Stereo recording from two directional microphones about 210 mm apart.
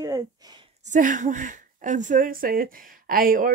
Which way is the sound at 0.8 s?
35° right (ahead or behind).